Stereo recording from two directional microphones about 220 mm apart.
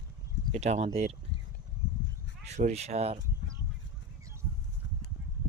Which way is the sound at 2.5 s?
30° right (ahead or behind).